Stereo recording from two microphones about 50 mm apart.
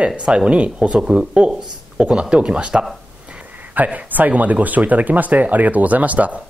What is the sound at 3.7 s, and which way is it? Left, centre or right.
Speech, right.